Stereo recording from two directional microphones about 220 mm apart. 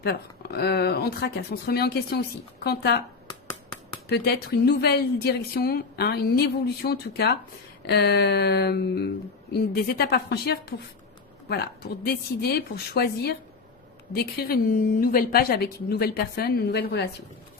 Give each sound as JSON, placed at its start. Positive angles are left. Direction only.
{"t": 0.0, "sound": "a woman's voice", "side_deg": 45}
{"t": 4.1, "sound": "a woman's voice", "side_deg": 50}